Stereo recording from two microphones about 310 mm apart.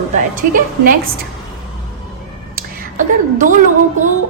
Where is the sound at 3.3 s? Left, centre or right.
Right.